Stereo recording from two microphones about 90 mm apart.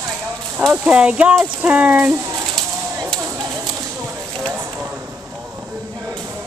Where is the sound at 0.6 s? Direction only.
15° right (ahead or behind).